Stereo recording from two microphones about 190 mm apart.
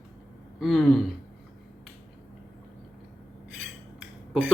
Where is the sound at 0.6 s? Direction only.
Centre (ahead or behind).